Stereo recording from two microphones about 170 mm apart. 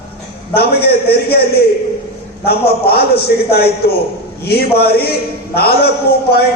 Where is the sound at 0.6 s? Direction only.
65° left (ahead or behind).